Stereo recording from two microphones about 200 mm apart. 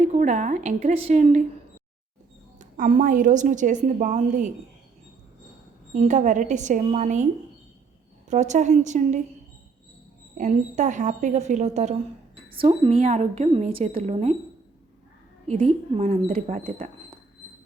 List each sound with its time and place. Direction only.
0.0 s a woman's voice: 35° right (ahead or behind)
2.6 s a woman's voice: 40° right (ahead or behind)
5.9 s a woman's voice: 35° right (ahead or behind)
8.3 s a woman's voice: 35° right (ahead or behind)
10.3 s a woman's voice: 40° right (ahead or behind)
15.4 s a woman's voice: 30° right (ahead or behind)